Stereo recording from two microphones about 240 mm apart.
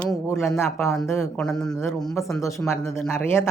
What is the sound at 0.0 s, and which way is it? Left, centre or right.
Speech, centre.